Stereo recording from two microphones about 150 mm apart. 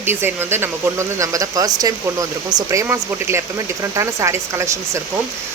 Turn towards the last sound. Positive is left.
turn(degrees=-20)  # may be behind; listen again after turning